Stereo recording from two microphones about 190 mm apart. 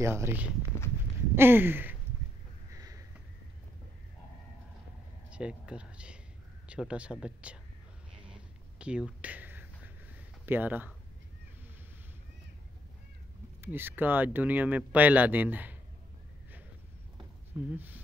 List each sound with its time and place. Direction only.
0.0 s speech: 15° right (ahead or behind)
2.7 s a sound: 15° right (ahead or behind)
5.3 s speech: 5° right (ahead or behind)
8.2 s a sound: 5° right (ahead or behind)
10.4 s speech: 10° right (ahead or behind)
13.6 s speech: 10° right (ahead or behind)
17.6 s speech: 10° right (ahead or behind)